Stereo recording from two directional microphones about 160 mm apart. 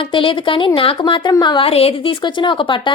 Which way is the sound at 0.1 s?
30° left (ahead or behind).